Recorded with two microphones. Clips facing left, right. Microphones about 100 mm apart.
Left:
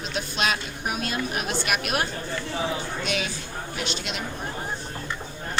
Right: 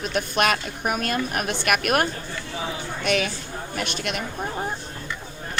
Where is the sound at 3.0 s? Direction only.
55° right (ahead or behind).